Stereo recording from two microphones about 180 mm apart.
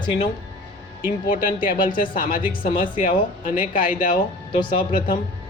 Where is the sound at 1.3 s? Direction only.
50° left (ahead or behind).